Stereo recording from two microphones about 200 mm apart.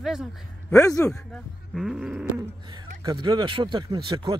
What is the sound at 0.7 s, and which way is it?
Speech, 15° left (ahead or behind).